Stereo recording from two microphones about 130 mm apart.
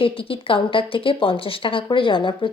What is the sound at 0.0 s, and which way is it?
Speech, 45° left (ahead or behind).